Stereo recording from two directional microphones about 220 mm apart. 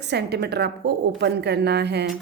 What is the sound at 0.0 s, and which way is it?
Speech, 50° right (ahead or behind).